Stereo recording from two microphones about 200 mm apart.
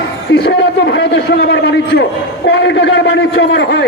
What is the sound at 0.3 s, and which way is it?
A man's voice, 60° left (ahead or behind).